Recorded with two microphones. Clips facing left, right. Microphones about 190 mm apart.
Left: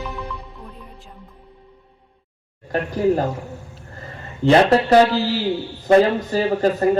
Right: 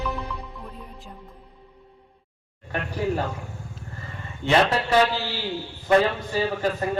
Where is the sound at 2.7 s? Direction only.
40° left (ahead or behind).